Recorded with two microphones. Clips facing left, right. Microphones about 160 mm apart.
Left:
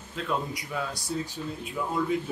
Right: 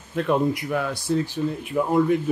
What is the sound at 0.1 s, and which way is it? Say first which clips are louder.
Speech: right 10 dB; 55° right (ahead or behind).